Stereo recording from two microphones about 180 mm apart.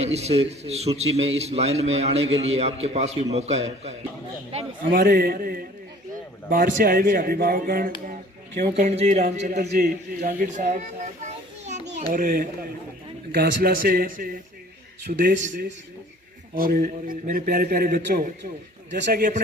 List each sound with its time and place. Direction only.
0.0 s a man's voice: 35° right (ahead or behind)
4.9 s a man's voice: 60° right (ahead or behind)
8.0 s a sound: 50° right (ahead or behind)
8.7 s a man's voice: 35° right (ahead or behind)
12.1 s a man's voice: 50° right (ahead or behind)